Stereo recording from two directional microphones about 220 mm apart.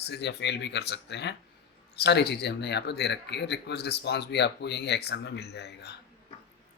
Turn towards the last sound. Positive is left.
turn(degrees=50)  # may be behind; listen again after turning